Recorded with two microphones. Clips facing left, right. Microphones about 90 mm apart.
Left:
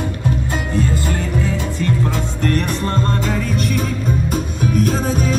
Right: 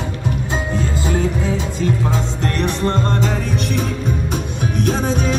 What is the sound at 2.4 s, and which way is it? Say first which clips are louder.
Music: left 1 dB; 45° left (ahead or behind).